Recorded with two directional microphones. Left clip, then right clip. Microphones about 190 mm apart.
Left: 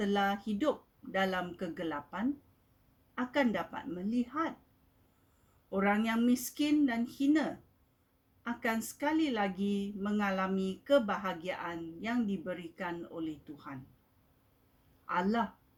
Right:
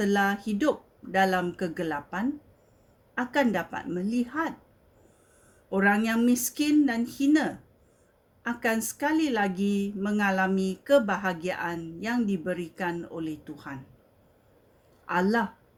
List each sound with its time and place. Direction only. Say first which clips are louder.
0.0 s speech: right 6 dB; 45° right (ahead or behind)
5.7 s speech: right 7 dB; 50° right (ahead or behind)
8.4 s speech: right 7 dB; 50° right (ahead or behind)
15.1 s speech: right 7 dB; 45° right (ahead or behind)